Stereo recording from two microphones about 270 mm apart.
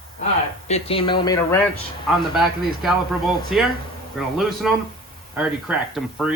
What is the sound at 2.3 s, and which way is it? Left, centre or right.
Speech, centre.